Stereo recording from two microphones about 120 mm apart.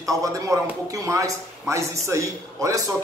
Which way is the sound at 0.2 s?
25° right (ahead or behind).